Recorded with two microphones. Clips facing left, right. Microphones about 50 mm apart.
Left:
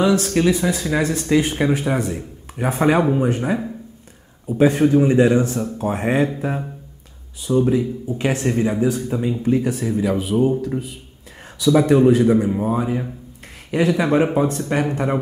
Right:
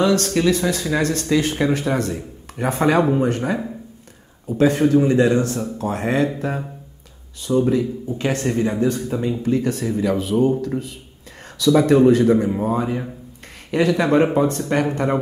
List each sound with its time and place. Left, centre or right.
0.0 s speech: centre
4.6 s speech: centre
6.3 s speech: centre
8.2 s speech: centre